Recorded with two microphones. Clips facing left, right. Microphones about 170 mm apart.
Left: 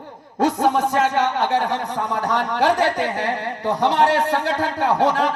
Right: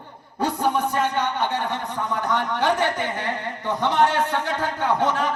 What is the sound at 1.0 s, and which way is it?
Speech, 40° left (ahead or behind).